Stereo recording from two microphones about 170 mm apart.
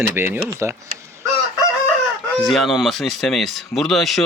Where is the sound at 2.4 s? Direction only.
Centre (ahead or behind).